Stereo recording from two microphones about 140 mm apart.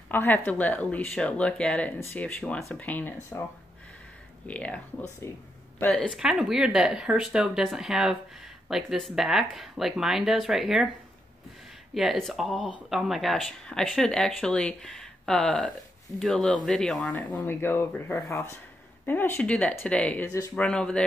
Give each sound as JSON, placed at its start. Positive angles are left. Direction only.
{"t": 0.1, "sound": "speech", "side_deg": 15}
{"t": 4.5, "sound": "speech", "side_deg": 10}
{"t": 5.2, "sound": "speech", "side_deg": 20}
{"t": 5.8, "sound": "speech", "side_deg": 5}
{"t": 11.9, "sound": "speech", "side_deg": 0}
{"t": 17.3, "sound": "speech", "side_deg": 15}
{"t": 20.2, "sound": "speech", "side_deg": 20}
{"t": 20.5, "sound": "speech", "side_deg": 5}